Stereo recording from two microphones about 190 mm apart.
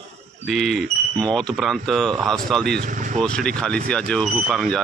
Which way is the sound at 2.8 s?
40° right (ahead or behind).